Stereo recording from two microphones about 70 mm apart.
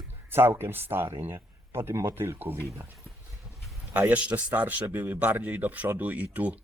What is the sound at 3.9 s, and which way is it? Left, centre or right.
Speech, right.